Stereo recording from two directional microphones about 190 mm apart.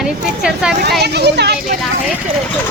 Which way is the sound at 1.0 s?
60° right (ahead or behind).